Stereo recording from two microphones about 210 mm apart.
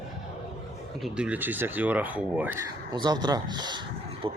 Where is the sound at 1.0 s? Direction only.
5° right (ahead or behind).